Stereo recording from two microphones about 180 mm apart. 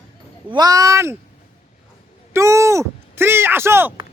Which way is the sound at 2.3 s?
15° right (ahead or behind).